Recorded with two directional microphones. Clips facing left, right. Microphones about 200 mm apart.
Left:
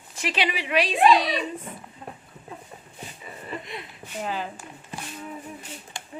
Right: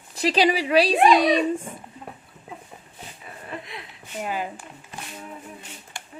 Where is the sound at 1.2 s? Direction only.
50° right (ahead or behind).